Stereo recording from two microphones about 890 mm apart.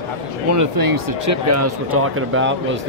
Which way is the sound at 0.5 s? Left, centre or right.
Right.